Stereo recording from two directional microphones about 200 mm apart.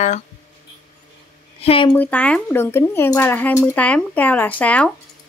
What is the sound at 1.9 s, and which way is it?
Speech, 10° left (ahead or behind).